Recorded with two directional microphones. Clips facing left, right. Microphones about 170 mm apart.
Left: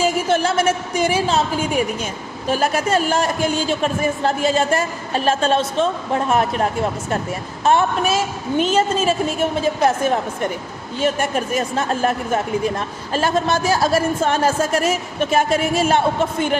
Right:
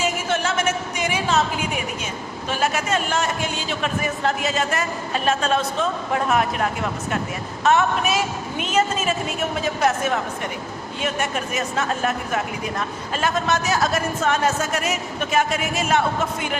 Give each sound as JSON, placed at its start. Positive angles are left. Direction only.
{"t": 0.0, "sound": "a woman's voice", "side_deg": 35}